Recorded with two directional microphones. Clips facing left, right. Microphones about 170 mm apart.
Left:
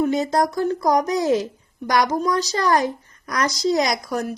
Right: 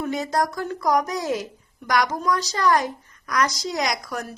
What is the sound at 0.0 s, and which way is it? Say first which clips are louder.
A woman's voice: left 5 dB; 25° left (ahead or behind).